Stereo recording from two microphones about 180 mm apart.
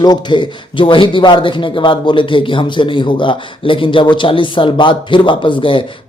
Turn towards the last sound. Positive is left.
turn(degrees=30)  # may be behind; listen again after turning